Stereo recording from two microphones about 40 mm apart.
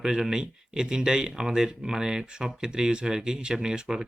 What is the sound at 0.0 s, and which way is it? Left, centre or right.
Speech, centre.